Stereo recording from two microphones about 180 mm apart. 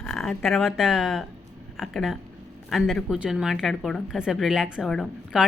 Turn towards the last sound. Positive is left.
turn(degrees=0)  # may be behind; listen again after turning